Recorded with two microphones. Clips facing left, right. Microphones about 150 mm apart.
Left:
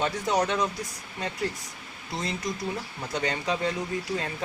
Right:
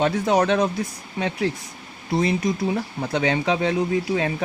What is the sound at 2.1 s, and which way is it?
Speech, 60° right (ahead or behind).